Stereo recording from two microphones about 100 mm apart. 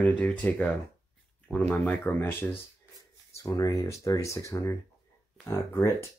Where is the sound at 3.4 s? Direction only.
35° left (ahead or behind).